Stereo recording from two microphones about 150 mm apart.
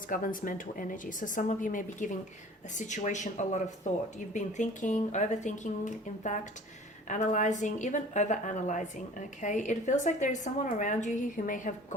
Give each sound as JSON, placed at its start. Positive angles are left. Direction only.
{"t": 0.1, "sound": "a woman's voice", "side_deg": 65}